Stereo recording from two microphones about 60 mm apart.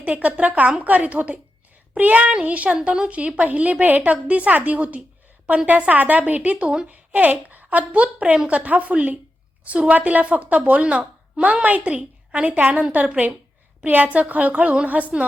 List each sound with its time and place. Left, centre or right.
0.0 s a woman's voice: right
2.7 s a woman's voice: centre